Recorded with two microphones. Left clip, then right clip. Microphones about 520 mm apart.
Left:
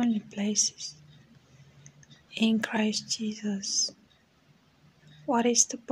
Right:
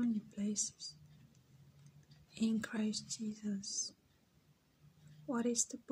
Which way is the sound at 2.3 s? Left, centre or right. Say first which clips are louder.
Left 12 dB; left.